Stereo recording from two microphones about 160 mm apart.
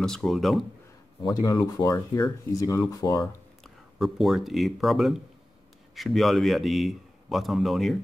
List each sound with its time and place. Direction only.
0.0 s a man's voice: 5° left (ahead or behind)
1.2 s speech: 25° left (ahead or behind)
3.6 s a man's voice: centre (ahead or behind)